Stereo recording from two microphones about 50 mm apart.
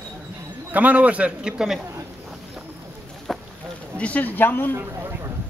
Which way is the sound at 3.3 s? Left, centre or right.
Centre.